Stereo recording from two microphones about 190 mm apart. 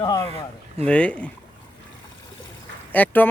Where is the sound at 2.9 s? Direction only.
10° left (ahead or behind).